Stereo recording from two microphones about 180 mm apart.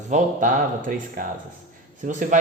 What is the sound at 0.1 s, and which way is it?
A man's voice, 45° right (ahead or behind).